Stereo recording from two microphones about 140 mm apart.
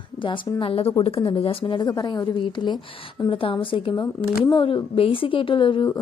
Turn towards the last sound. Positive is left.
turn(degrees=35)  # may be behind; listen again after turning